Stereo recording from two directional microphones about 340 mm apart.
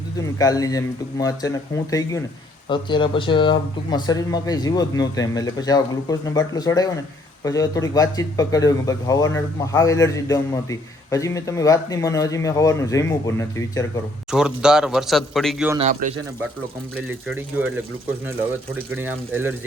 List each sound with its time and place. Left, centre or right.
0.2 s speech: centre
14.3 s a man's voice: centre
15.8 s speech: right
17.1 s a man's voice: centre
18.9 s a man's voice: centre